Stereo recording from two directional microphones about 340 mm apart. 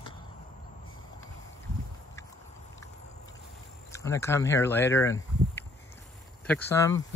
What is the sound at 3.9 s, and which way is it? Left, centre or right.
Speech, centre.